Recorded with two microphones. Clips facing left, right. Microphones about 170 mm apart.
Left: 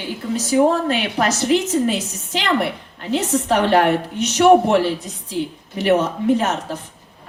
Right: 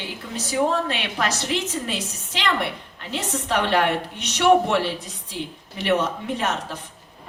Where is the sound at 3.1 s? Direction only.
40° left (ahead or behind).